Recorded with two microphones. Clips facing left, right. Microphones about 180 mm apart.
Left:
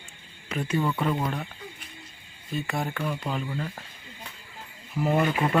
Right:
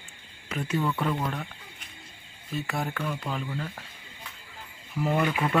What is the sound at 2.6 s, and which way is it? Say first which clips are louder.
Speech: left 1 dB; centre (ahead or behind).